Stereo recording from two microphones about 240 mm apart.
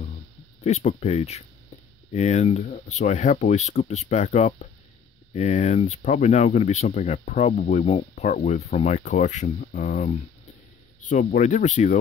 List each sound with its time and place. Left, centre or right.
0.7 s speech: left